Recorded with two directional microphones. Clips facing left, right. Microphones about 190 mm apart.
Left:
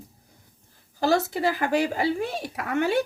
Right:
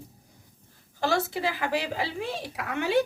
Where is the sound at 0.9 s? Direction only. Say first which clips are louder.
Left 4 dB; 40° left (ahead or behind).